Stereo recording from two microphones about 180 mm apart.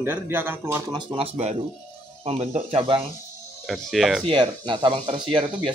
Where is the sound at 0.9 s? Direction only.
30° right (ahead or behind).